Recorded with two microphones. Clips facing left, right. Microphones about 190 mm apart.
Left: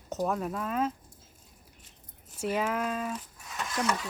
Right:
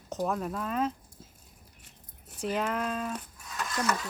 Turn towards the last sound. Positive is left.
turn(degrees=15)  # may be behind; listen again after turning